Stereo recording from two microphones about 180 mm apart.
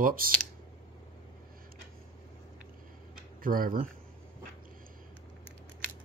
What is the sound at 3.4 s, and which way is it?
Speech, 50° right (ahead or behind).